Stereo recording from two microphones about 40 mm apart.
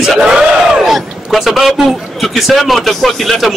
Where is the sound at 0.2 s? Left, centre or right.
Right.